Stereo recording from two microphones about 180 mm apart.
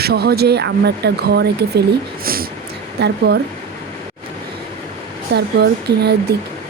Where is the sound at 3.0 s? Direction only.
65° right (ahead or behind).